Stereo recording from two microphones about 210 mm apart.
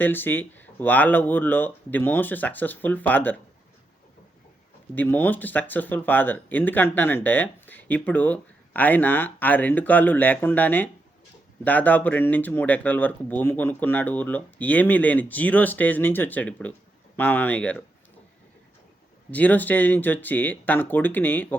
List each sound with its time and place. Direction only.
0.0 s speech: 10° left (ahead or behind)
4.9 s speech: 10° left (ahead or behind)
19.3 s speech: 5° left (ahead or behind)